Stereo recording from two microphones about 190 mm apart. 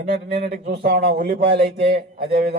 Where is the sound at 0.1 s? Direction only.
55° right (ahead or behind).